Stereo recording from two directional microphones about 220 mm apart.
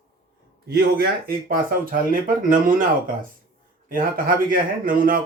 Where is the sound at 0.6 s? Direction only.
40° right (ahead or behind).